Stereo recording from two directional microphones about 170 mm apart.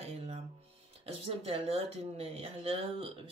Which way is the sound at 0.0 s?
35° right (ahead or behind).